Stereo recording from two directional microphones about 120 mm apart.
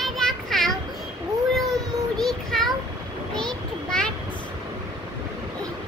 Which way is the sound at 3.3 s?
5° left (ahead or behind).